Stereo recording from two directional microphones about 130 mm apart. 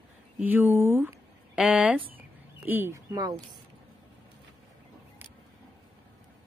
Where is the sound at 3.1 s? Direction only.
30° right (ahead or behind).